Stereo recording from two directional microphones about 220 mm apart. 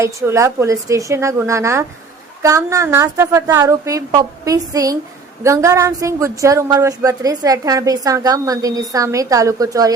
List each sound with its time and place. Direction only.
0.0 s a woman's voice: 15° right (ahead or behind)